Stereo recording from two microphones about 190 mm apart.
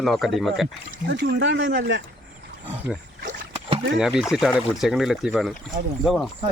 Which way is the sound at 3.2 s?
35° right (ahead or behind).